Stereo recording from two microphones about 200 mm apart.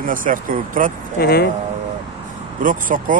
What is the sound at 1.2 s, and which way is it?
Speech, 50° left (ahead or behind).